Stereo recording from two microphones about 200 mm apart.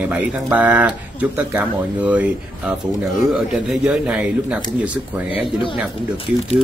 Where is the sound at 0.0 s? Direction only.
5° right (ahead or behind).